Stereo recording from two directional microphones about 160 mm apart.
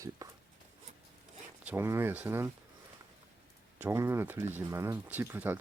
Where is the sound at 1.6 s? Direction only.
15° right (ahead or behind).